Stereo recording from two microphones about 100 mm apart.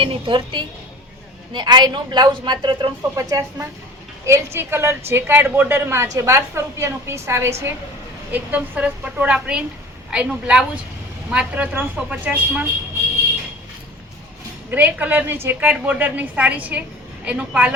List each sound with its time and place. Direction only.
0.0 s a woman's voice: 55° right (ahead or behind)
3.0 s a woman's voice: 35° right (ahead or behind)
8.3 s a woman's voice: 15° right (ahead or behind)
14.7 s a woman's voice: 15° right (ahead or behind)